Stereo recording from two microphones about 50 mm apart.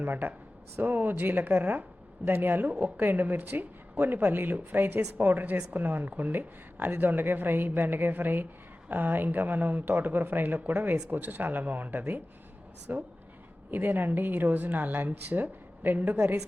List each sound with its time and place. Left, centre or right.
0.0 s a woman's voice: right